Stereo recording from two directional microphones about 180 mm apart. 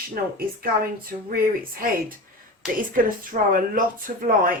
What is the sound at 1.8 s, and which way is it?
A woman's voice, 50° right (ahead or behind).